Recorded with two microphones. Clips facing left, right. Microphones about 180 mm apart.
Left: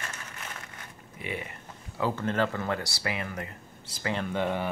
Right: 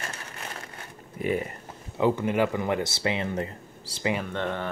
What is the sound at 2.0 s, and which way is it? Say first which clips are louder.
Speech: right 5 dB; 15° right (ahead or behind).